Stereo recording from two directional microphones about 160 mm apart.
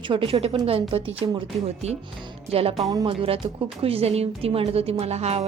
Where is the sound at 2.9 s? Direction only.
25° right (ahead or behind).